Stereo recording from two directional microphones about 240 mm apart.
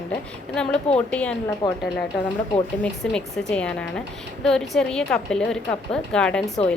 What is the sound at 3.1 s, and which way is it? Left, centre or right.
A woman's voice, centre.